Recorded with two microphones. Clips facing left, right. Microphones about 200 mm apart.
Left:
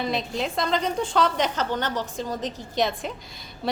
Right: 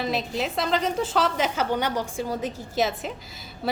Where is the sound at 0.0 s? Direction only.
Centre (ahead or behind).